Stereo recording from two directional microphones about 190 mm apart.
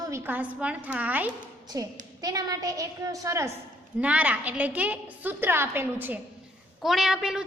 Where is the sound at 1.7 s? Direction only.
20° right (ahead or behind).